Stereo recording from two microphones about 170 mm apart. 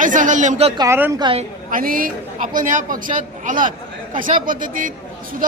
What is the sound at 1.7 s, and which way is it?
Speech, 55° right (ahead or behind).